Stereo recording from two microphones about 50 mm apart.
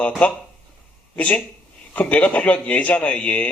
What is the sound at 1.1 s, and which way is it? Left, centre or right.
A man's voice, left.